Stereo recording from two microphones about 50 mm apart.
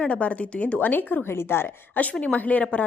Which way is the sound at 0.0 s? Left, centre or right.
Left.